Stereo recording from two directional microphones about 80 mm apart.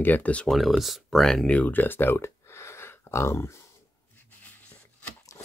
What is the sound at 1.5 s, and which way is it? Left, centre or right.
Speech, centre.